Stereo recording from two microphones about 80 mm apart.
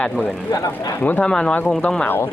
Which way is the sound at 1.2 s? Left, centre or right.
Centre.